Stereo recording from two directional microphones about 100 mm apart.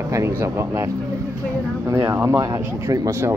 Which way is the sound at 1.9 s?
30° right (ahead or behind).